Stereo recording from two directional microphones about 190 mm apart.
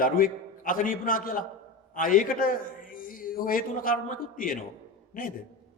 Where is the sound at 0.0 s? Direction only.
45° left (ahead or behind).